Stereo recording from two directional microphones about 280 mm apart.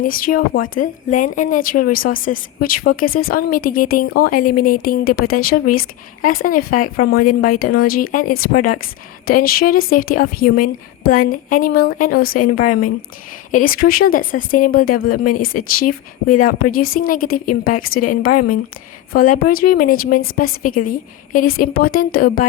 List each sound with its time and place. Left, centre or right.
0.0 s a woman's voice: left
19.1 s a woman's voice: left